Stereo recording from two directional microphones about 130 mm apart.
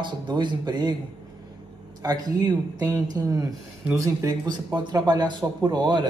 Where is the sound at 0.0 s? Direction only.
35° right (ahead or behind).